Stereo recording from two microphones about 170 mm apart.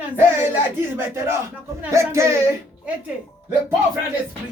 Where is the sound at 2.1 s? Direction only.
15° right (ahead or behind).